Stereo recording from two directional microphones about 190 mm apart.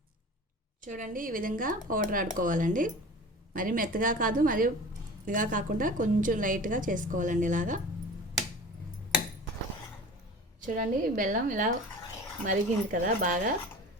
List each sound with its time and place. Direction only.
0.8 s a woman's voice: 45° right (ahead or behind)
10.7 s a woman's voice: 45° right (ahead or behind)